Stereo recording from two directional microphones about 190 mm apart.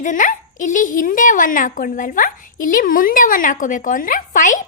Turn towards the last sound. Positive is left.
turn(degrees=45)  # may be behind; listen again after turning